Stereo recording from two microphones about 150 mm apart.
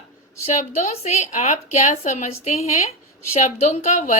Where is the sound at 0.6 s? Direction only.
55° left (ahead or behind).